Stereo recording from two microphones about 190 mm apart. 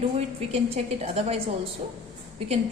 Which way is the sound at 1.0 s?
35° right (ahead or behind).